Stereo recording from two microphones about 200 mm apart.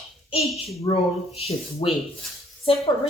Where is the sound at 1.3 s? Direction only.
30° left (ahead or behind).